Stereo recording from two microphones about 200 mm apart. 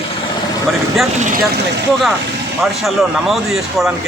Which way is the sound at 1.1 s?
40° right (ahead or behind).